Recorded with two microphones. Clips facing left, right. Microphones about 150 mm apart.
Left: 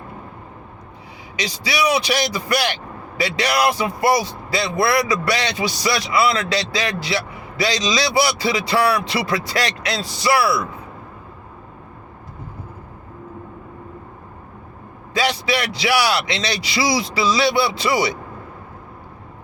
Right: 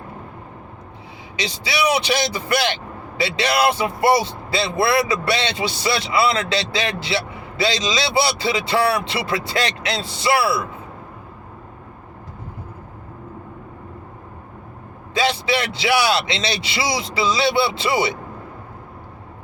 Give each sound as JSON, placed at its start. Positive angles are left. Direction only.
{"t": 1.4, "sound": "speech", "side_deg": -25}
{"t": 15.1, "sound": "speech", "side_deg": -20}